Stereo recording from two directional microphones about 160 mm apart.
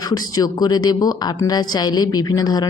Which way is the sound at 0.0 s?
25° left (ahead or behind).